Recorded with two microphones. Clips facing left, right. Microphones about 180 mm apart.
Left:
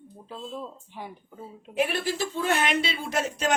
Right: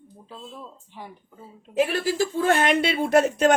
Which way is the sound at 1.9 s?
40° right (ahead or behind).